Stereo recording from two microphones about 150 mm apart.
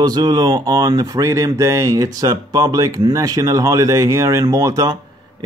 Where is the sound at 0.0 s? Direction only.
25° right (ahead or behind).